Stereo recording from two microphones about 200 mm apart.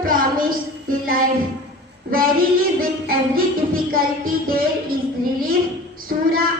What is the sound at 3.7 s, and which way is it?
A woman's voice, 45° right (ahead or behind).